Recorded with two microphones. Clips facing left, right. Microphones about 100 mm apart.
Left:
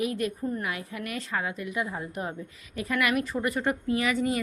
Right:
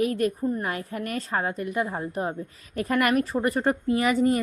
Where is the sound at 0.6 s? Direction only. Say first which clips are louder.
Right 4 dB; 45° right (ahead or behind).